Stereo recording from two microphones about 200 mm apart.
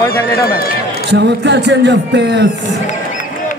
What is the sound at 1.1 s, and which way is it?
A man's voice, 60° right (ahead or behind).